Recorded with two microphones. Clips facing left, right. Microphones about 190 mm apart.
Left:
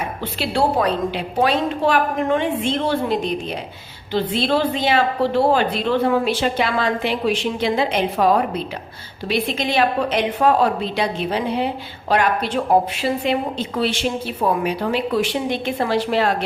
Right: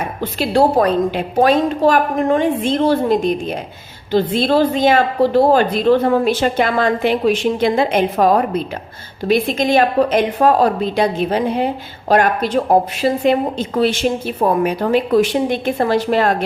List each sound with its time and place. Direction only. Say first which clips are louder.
0.2 s a woman's voice: right 7 dB; 45° right (ahead or behind)